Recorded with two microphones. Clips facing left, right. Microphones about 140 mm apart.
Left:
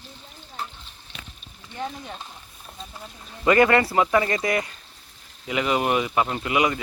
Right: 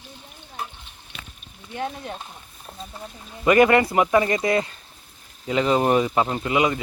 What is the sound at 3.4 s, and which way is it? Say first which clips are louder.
Speech: right 2 dB; 20° right (ahead or behind).